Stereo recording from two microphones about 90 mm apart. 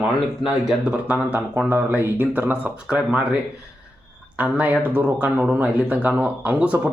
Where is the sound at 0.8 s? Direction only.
15° right (ahead or behind).